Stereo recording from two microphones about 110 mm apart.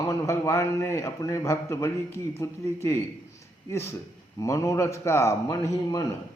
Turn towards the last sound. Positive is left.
turn(degrees=30)  # may be behind; listen again after turning